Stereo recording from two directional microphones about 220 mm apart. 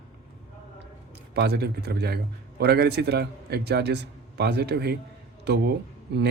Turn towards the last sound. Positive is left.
turn(degrees=-50)  # may be behind; listen again after turning